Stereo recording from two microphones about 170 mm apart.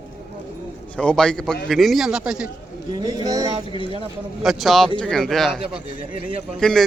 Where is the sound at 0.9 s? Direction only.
5° left (ahead or behind).